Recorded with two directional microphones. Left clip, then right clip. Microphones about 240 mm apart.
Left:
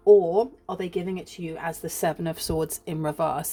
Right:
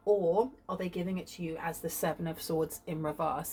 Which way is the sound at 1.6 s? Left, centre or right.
Left.